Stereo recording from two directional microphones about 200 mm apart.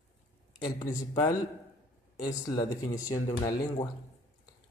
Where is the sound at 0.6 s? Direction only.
20° left (ahead or behind).